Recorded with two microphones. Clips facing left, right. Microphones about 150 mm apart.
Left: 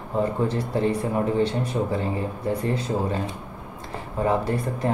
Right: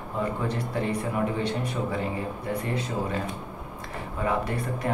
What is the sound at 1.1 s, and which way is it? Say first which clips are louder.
Speech: left 5 dB; 35° left (ahead or behind).